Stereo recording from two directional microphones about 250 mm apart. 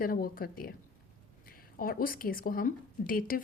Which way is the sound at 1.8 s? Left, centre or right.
Left.